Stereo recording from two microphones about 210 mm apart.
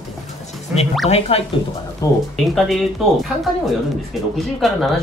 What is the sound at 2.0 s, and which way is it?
Speech, 15° left (ahead or behind).